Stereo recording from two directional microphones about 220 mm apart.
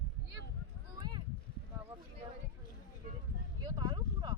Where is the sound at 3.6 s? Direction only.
20° right (ahead or behind).